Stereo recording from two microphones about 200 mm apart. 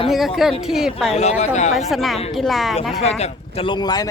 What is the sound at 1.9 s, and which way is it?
Speech, centre (ahead or behind).